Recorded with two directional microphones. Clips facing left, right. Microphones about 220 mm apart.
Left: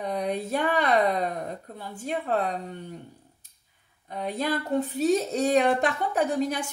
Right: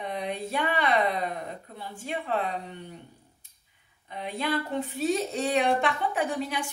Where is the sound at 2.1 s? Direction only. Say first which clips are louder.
Left 3 dB; 40° left (ahead or behind).